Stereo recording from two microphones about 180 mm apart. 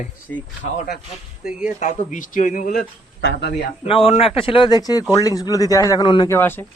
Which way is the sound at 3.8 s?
30° left (ahead or behind).